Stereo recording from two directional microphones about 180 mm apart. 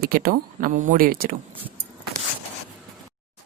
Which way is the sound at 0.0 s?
55° right (ahead or behind).